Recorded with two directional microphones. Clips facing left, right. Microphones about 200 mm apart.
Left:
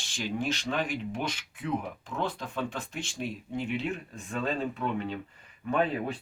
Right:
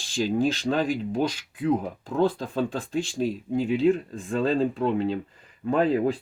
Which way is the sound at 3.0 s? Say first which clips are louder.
Right 9 dB; 35° right (ahead or behind).